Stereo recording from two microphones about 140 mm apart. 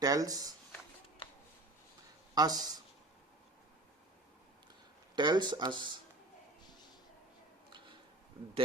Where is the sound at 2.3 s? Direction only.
30° right (ahead or behind).